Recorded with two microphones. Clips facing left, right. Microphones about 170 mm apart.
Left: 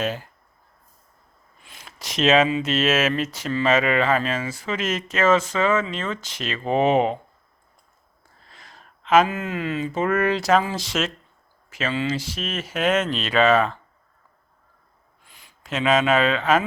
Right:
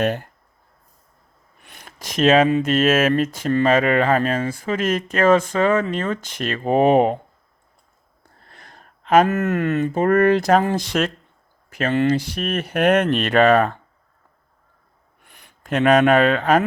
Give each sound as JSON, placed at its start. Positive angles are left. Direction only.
{"t": 0.0, "sound": "speech", "side_deg": -60}
{"t": 1.6, "sound": "speech", "side_deg": -55}
{"t": 8.2, "sound": "speech", "side_deg": -55}
{"t": 15.2, "sound": "speech", "side_deg": -60}